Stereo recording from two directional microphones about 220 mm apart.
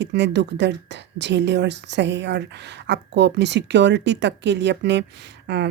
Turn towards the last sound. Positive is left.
turn(degrees=-50)  # may be behind; listen again after turning